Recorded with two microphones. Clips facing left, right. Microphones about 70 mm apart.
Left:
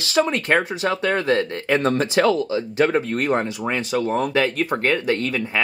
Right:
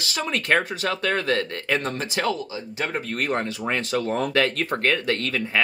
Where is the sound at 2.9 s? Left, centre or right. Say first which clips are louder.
Left 5 dB; left.